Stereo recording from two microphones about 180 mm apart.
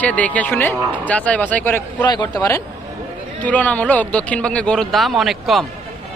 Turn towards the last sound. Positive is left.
turn(degrees=0)  # may be behind; listen again after turning